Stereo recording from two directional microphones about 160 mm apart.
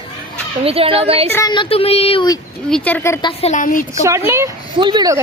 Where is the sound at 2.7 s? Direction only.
5° left (ahead or behind).